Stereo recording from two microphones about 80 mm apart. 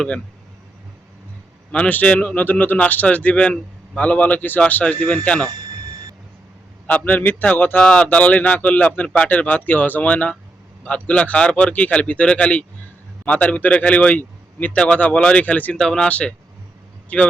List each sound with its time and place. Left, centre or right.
1.7 s a man's voice: centre
6.8 s speech: centre
7.8 s a man's voice: centre
15.8 s a man's voice: centre